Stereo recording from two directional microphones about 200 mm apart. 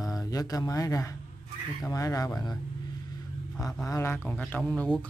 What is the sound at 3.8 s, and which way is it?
Speech, 15° left (ahead or behind).